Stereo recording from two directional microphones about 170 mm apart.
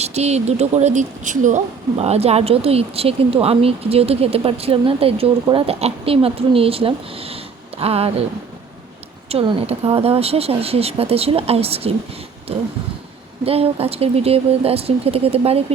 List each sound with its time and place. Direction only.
0.0 s speech: 40° right (ahead or behind)
9.3 s speech: 30° right (ahead or behind)
13.4 s speech: 35° right (ahead or behind)